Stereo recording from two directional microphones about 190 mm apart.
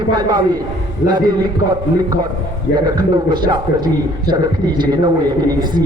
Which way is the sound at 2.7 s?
20° right (ahead or behind).